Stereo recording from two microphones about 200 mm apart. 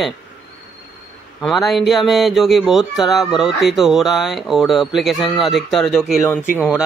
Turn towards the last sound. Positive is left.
turn(degrees=10)  # may be behind; listen again after turning